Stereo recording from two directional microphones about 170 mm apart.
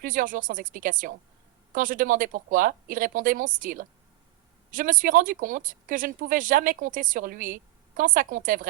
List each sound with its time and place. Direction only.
0.0 s speech: 55° right (ahead or behind)